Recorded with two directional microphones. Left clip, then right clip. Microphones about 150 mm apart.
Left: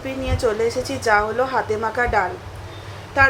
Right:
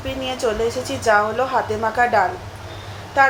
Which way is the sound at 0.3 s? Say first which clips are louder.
Left 1 dB; 20° left (ahead or behind).